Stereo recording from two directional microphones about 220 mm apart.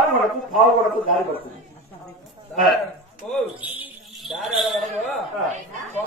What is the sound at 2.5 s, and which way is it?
A man's voice, centre (ahead or behind).